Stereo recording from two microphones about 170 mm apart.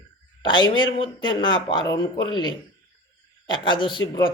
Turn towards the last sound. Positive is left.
turn(degrees=25)  # may be behind; listen again after turning